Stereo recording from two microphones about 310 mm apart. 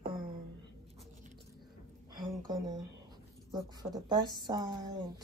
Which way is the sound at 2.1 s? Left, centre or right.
Centre.